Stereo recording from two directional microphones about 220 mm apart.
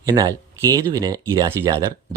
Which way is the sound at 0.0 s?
15° right (ahead or behind).